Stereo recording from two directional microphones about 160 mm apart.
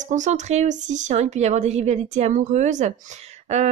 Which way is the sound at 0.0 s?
50° right (ahead or behind).